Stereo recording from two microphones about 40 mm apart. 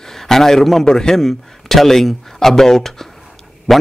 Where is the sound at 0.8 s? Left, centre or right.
Centre.